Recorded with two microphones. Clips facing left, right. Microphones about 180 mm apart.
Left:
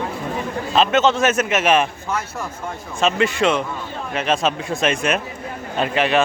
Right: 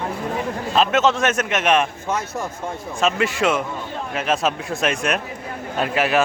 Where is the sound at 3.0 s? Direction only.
Centre (ahead or behind).